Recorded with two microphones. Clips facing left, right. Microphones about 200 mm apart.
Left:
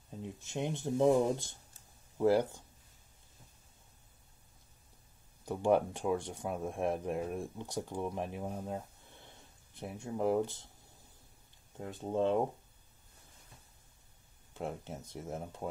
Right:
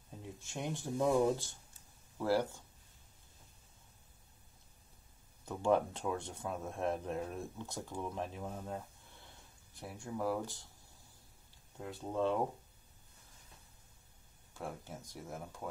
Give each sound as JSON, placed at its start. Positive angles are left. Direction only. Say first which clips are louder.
{"t": 0.4, "sound": "speech", "louder": "left 4 dB", "side_deg": 20}
{"t": 5.4, "sound": "speech", "louder": "left 3 dB", "side_deg": 15}
{"t": 11.8, "sound": "speech", "louder": "left 3 dB", "side_deg": 20}
{"t": 14.5, "sound": "speech", "louder": "left 4 dB", "side_deg": 20}